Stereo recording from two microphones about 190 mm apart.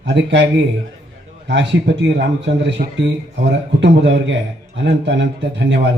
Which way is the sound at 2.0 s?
70° right (ahead or behind).